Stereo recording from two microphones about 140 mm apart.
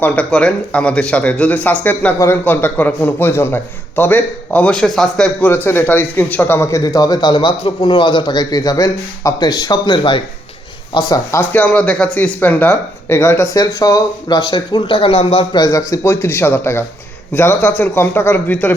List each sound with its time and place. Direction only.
0.0 s a man's voice: 10° left (ahead or behind); by 15.8 s 30° left (ahead or behind)
15.9 s speech: 20° left (ahead or behind)